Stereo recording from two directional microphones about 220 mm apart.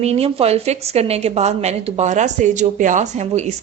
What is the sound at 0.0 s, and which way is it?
A woman's voice, 25° right (ahead or behind).